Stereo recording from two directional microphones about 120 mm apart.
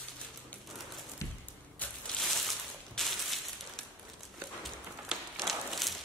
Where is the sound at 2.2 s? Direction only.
Centre (ahead or behind).